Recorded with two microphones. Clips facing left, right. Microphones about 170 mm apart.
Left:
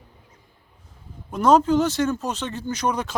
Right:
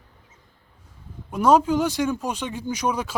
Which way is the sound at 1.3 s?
10° right (ahead or behind).